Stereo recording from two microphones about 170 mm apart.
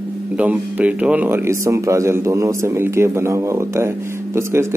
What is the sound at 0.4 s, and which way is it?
A man's voice, 10° right (ahead or behind).